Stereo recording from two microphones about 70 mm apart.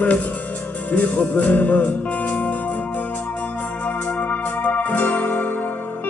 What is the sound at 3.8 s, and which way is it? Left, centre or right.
Music, left.